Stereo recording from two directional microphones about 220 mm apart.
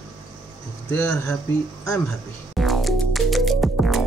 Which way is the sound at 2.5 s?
Centre (ahead or behind).